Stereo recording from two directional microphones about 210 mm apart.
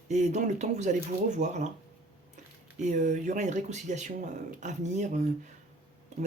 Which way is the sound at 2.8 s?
35° right (ahead or behind).